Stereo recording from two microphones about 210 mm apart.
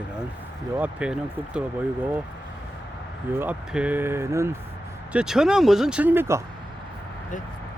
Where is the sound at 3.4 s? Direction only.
5° right (ahead or behind).